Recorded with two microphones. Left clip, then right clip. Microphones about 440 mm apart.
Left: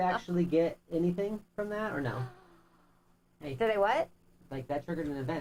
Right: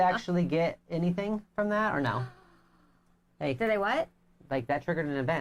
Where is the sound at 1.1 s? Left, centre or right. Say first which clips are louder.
Right 3 dB; right.